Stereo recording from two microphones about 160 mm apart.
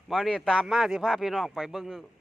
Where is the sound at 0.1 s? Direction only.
Centre (ahead or behind).